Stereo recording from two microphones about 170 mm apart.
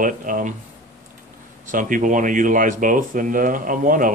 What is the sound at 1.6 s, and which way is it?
Speech, 50° right (ahead or behind).